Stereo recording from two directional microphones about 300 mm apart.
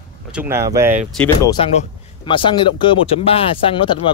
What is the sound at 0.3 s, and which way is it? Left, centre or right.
Speech, centre.